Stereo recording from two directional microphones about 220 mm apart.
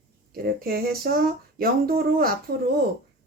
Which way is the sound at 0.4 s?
45° right (ahead or behind).